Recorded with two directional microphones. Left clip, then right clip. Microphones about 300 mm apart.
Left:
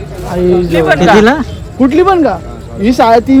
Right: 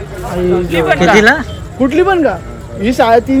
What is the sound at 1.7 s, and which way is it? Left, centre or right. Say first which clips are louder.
Speech: left 3 dB; left.